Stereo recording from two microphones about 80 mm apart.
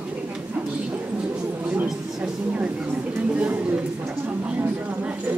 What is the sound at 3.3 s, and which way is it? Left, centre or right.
Speech, centre.